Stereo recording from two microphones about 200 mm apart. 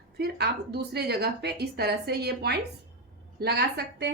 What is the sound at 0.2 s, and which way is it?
A woman's voice, 55° right (ahead or behind).